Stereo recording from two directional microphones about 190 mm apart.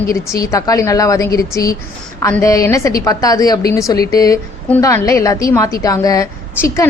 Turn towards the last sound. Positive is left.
turn(degrees=15)  # may be behind; listen again after turning